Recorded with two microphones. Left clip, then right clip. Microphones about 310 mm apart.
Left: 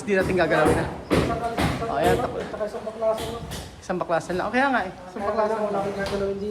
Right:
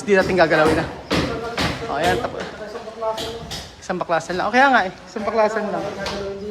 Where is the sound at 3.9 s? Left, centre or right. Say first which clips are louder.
Right 3 dB; centre.